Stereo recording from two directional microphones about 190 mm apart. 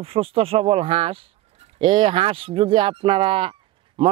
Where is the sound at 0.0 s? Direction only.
30° right (ahead or behind).